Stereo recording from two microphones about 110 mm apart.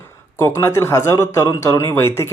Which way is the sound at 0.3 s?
25° left (ahead or behind).